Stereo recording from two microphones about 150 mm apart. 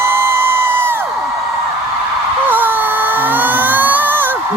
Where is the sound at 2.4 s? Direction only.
15° right (ahead or behind).